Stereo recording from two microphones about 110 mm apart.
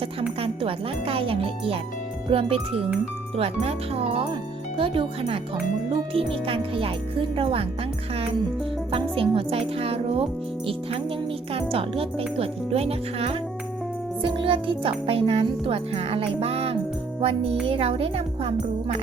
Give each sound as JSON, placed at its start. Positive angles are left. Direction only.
{"t": 0.2, "sound": "speech", "side_deg": -60}
{"t": 8.9, "sound": "speech", "side_deg": -55}
{"t": 11.5, "sound": "speech", "side_deg": -60}
{"t": 14.2, "sound": "speech", "side_deg": -50}